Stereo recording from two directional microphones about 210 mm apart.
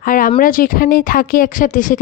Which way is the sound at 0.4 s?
40° left (ahead or behind).